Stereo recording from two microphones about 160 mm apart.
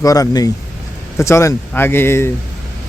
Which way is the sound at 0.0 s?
20° left (ahead or behind).